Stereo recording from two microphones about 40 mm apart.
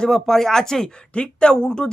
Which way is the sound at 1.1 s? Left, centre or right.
Left.